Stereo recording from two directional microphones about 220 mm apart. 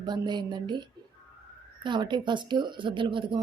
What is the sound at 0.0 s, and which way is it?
Speech, 20° right (ahead or behind).